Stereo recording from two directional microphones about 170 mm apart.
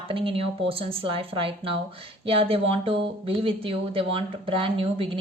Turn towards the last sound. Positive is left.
turn(degrees=-30)  # may be behind; listen again after turning